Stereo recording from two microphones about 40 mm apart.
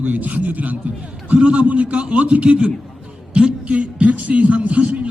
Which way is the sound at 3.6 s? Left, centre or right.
Right.